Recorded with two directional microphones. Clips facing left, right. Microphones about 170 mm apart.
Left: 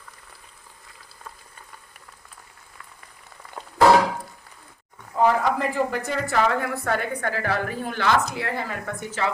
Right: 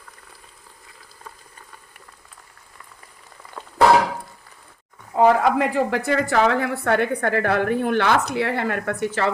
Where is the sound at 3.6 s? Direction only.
30° left (ahead or behind).